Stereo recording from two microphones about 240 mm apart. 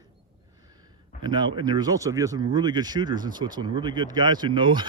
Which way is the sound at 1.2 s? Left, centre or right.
Centre.